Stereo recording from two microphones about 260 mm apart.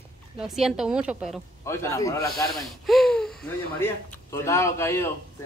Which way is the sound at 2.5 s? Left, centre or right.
Centre.